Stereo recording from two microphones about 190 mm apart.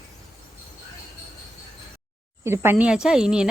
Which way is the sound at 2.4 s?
15° right (ahead or behind).